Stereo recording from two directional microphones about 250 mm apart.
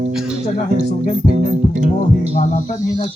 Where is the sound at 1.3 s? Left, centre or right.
Right.